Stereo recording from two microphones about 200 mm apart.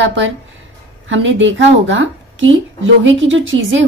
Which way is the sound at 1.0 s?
70° right (ahead or behind).